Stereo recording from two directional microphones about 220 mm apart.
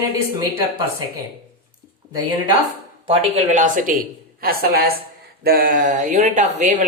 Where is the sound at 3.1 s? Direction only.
30° right (ahead or behind).